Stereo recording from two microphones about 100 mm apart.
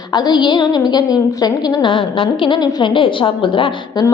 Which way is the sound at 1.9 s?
60° left (ahead or behind).